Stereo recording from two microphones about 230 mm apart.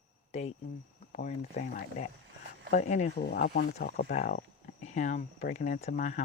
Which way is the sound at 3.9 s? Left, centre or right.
Left.